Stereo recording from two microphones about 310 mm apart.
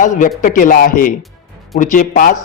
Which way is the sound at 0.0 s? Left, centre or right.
Left.